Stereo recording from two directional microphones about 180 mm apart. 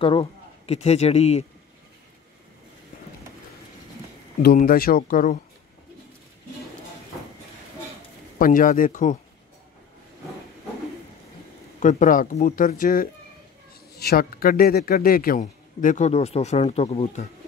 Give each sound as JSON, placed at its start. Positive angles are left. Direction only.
{"t": 0.0, "sound": "speech", "side_deg": 30}
{"t": 4.6, "sound": "a man's voice", "side_deg": 55}
{"t": 8.4, "sound": "a man's voice", "side_deg": 50}
{"t": 11.8, "sound": "a man's voice", "side_deg": 40}